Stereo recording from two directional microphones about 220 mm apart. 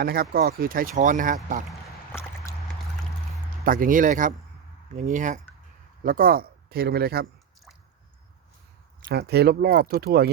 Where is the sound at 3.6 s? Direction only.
40° right (ahead or behind).